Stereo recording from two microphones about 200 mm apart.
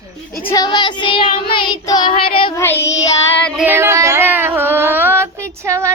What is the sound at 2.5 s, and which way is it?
Child singing, 10° left (ahead or behind).